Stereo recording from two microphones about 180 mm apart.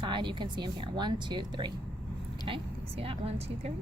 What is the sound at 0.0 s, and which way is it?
Speech, 25° right (ahead or behind).